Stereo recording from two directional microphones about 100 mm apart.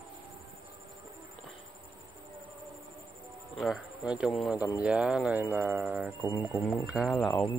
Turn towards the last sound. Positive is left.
turn(degrees=5)  # may be behind; listen again after turning